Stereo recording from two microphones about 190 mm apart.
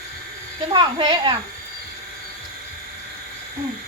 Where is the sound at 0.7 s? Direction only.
25° right (ahead or behind).